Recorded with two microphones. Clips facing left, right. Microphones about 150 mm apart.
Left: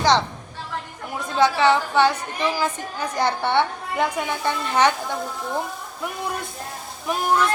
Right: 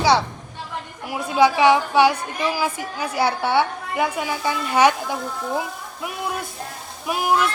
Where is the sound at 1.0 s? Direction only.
10° right (ahead or behind).